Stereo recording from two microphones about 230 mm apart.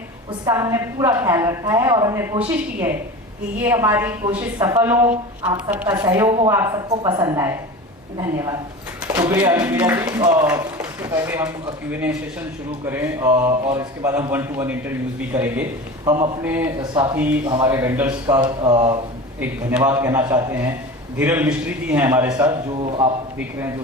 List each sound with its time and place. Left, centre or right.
0.4 s a man's voice: centre
18.3 s speech: centre
19.4 s speech: centre
22.8 s speech: right